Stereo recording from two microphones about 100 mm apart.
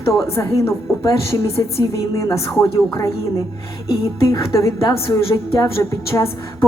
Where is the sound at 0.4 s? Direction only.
35° left (ahead or behind).